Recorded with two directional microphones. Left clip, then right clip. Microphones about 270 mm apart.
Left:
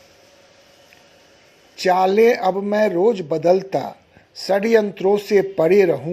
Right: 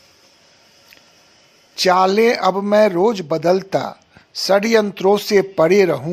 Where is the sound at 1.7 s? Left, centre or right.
Right.